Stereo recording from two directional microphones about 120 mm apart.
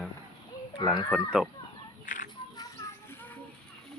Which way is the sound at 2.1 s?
90° left.